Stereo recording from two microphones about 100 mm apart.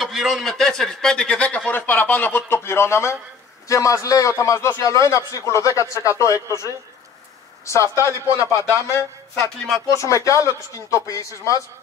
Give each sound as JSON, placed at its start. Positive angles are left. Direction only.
{"t": 0.0, "sound": "a man's voice", "side_deg": 0}